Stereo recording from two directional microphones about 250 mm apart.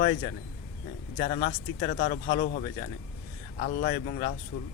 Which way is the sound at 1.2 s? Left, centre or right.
Left.